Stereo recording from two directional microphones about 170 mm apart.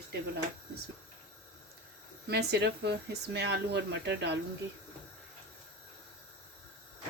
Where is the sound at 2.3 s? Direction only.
75° right (ahead or behind).